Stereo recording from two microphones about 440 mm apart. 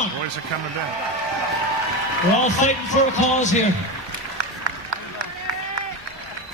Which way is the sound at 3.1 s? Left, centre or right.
Centre.